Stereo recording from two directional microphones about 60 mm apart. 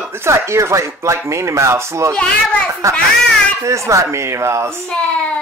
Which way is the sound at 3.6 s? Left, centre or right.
Right.